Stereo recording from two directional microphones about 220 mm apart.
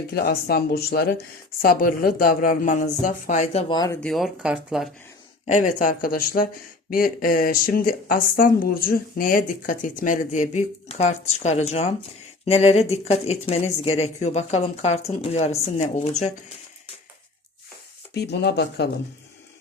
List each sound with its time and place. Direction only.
0.1 s speech: 45° left (ahead or behind); by 3.9 s 20° left (ahead or behind)
4.0 s speech: centre (ahead or behind)
5.5 s speech: 35° left (ahead or behind)
18.1 s speech: 50° left (ahead or behind)